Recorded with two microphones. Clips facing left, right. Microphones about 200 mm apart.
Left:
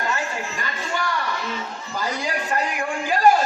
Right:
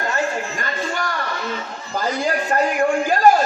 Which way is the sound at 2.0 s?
45° right (ahead or behind).